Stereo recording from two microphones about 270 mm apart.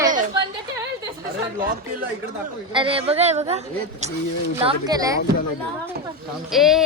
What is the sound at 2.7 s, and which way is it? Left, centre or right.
A woman's voice, centre.